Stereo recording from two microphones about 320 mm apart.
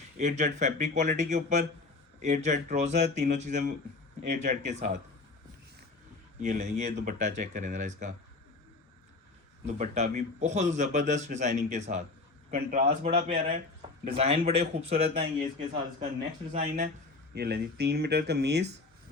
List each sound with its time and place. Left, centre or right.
0.2 s a man's voice: right
6.4 s a man's voice: right
9.6 s a man's voice: right
16.5 s a man's voice: right